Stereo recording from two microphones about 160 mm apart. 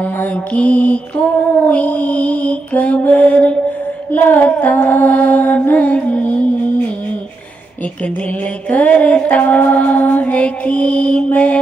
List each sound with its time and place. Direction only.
0.0 s music: 10° left (ahead or behind)
8.6 s music: 10° left (ahead or behind)